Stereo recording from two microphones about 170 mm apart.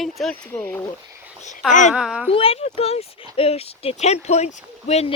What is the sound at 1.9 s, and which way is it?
Speech, 5° right (ahead or behind).